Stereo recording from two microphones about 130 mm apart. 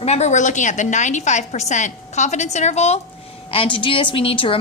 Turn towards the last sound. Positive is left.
turn(degrees=45)  # may be behind; listen again after turning